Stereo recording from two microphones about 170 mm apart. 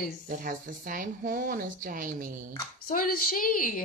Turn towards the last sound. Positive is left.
turn(degrees=55)  # may be behind; listen again after turning